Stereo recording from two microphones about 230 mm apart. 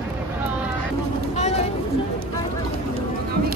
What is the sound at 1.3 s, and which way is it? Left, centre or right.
Vehicle, left.